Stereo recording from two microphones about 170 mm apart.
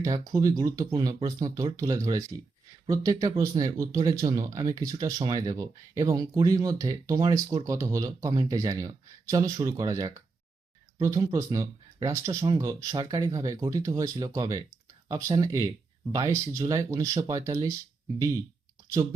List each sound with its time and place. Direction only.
0.0 s speech: 20° right (ahead or behind)